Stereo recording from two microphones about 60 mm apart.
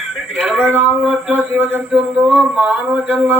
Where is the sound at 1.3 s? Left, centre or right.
Right.